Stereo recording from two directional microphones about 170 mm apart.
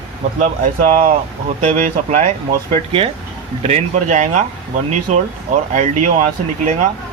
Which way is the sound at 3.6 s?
40° right (ahead or behind).